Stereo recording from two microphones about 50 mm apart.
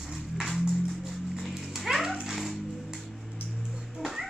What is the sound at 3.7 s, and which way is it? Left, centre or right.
Music, centre.